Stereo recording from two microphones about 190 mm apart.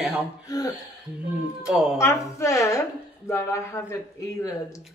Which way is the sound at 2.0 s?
15° left (ahead or behind).